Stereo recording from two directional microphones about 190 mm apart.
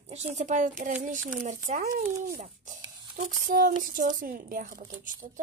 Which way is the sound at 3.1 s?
50° right (ahead or behind).